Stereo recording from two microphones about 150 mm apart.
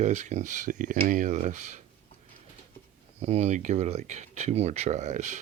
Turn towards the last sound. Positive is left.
turn(degrees=-50)  # may be behind; listen again after turning